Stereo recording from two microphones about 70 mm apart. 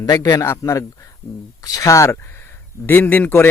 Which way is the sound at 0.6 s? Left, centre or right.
Left.